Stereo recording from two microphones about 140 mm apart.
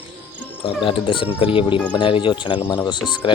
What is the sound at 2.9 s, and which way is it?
Speech, 35° left (ahead or behind).